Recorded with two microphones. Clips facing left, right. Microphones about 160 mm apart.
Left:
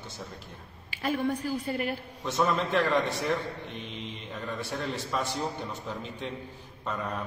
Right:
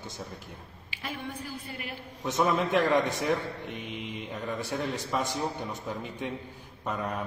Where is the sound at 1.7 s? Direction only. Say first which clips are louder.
Left 10 dB; 45° left (ahead or behind).